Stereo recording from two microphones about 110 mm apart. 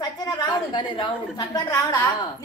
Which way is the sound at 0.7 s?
40° left (ahead or behind).